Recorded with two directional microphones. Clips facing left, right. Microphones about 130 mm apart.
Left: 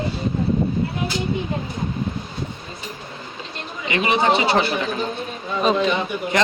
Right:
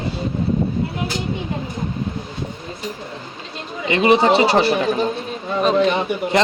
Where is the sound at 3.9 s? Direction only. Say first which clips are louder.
Right 5 dB; 35° right (ahead or behind).